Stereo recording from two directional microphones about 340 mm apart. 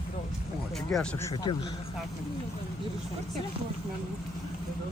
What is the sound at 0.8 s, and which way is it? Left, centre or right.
Speech, centre.